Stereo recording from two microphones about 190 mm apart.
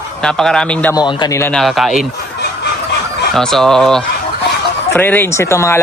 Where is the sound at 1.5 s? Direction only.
Centre (ahead or behind).